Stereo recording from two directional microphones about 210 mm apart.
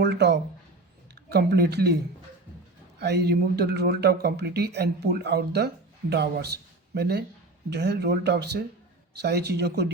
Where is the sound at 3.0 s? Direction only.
50° right (ahead or behind).